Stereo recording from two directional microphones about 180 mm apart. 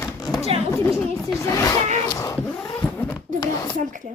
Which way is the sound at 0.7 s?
15° left (ahead or behind).